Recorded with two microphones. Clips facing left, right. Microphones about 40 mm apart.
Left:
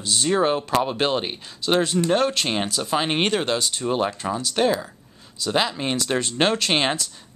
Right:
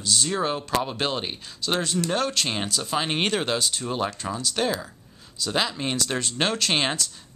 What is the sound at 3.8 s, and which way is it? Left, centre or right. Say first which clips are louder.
Speech: left 4 dB; centre.